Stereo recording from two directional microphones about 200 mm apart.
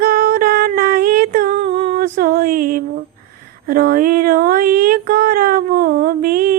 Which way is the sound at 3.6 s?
45° right (ahead or behind).